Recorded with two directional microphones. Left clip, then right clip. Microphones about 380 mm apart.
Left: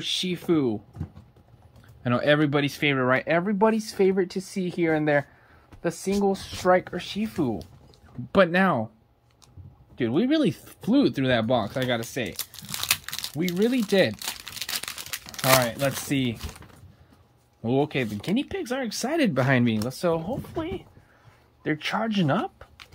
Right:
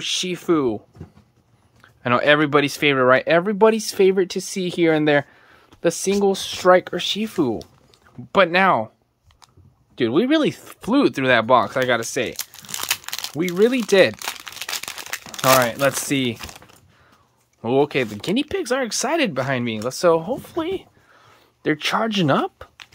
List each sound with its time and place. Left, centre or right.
0.0 s speech: centre
2.0 s speech: centre
8.3 s speech: centre
9.9 s speech: centre
12.8 s crumpling: centre
15.8 s speech: centre
21.6 s speech: centre